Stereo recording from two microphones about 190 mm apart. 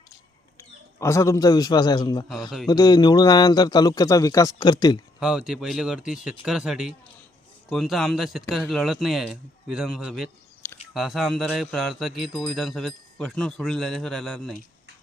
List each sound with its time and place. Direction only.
0.9 s a man's voice: 15° left (ahead or behind)
2.3 s speech: centre (ahead or behind)
2.6 s a man's voice: 20° left (ahead or behind)
5.2 s speech: 5° right (ahead or behind)